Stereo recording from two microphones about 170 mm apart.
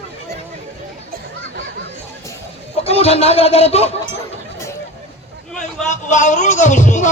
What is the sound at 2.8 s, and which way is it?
Speech, 35° left (ahead or behind).